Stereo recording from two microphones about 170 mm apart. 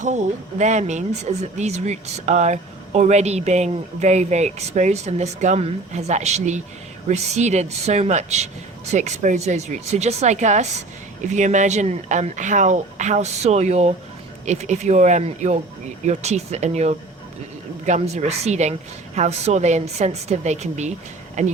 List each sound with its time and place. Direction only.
0.6 s a woman's voice: 45° right (ahead or behind)